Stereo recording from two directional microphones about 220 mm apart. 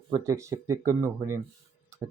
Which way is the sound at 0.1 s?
15° right (ahead or behind).